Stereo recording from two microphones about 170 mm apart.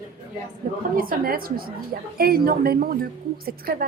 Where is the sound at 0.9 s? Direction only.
60° right (ahead or behind).